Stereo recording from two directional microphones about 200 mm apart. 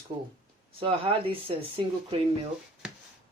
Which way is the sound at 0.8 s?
25° right (ahead or behind).